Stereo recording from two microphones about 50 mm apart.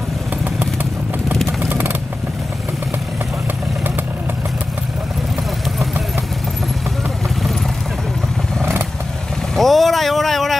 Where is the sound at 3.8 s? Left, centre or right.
Right.